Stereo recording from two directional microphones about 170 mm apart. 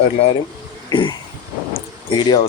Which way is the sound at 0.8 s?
25° left (ahead or behind).